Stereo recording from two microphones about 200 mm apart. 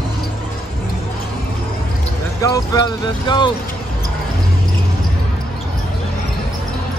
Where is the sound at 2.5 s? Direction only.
20° left (ahead or behind).